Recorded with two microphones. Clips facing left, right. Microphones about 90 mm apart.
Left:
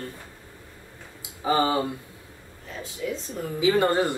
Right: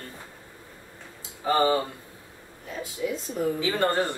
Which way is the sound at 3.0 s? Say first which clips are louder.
Right 1 dB; 15° right (ahead or behind).